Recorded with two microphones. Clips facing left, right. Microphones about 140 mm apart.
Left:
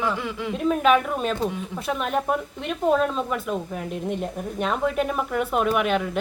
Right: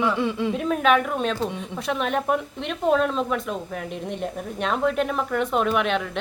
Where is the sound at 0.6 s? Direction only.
5° left (ahead or behind).